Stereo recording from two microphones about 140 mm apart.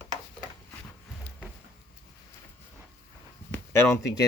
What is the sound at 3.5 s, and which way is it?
Speech, 20° left (ahead or behind).